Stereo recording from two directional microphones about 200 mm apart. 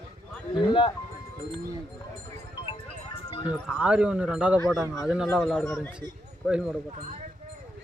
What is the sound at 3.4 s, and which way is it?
Speech, 5° right (ahead or behind).